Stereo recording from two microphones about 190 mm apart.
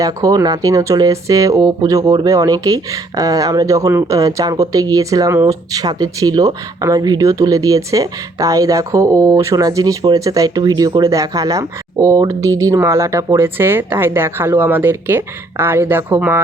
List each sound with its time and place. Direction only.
0.0 s speech: 20° right (ahead or behind)